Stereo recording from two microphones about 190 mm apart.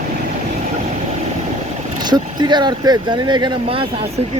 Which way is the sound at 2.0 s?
20° right (ahead or behind).